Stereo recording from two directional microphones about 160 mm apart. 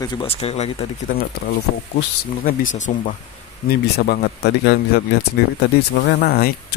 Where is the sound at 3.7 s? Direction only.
75° left (ahead or behind).